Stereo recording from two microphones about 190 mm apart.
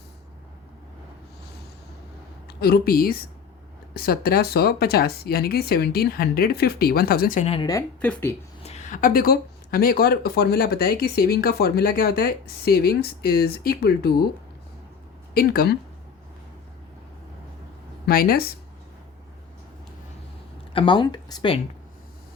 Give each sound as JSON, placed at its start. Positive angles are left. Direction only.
{"t": 2.6, "sound": "speech", "side_deg": 55}
{"t": 7.7, "sound": "speech", "side_deg": 15}
{"t": 8.6, "sound": "speech", "side_deg": 35}
{"t": 15.4, "sound": "speech", "side_deg": 50}
{"t": 18.0, "sound": "speech", "side_deg": 50}
{"t": 20.7, "sound": "speech", "side_deg": 25}